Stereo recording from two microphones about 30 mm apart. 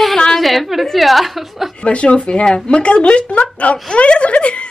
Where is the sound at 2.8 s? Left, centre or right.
Left.